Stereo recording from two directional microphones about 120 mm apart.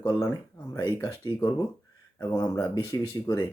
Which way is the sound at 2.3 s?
15° left (ahead or behind).